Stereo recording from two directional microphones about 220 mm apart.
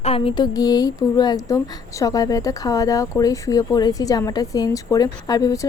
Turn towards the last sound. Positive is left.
turn(degrees=15)  # may be behind; listen again after turning